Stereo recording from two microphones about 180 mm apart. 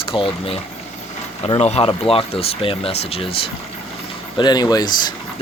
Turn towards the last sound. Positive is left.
turn(degrees=20)  # may be behind; listen again after turning